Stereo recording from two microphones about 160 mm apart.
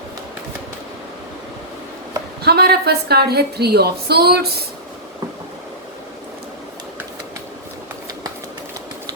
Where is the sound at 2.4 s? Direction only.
80° right.